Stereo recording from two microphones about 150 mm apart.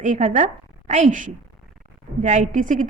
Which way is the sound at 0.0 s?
55° right (ahead or behind).